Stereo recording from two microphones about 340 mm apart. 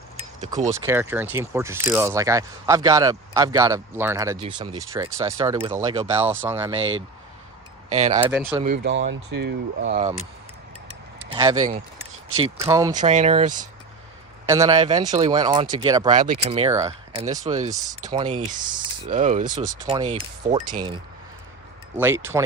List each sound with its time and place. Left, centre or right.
0.3 s speech: centre
0.7 s speech: centre
7.9 s speech: centre
8.2 s speech: centre
8.5 s speech: right
11.3 s speech: centre
13.0 s speech: right
14.5 s speech: centre
21.9 s speech: centre